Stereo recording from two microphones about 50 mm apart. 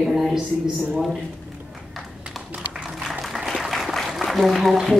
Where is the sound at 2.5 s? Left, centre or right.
Right.